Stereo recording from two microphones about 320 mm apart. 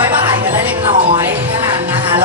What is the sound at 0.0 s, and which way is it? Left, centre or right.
Music, centre.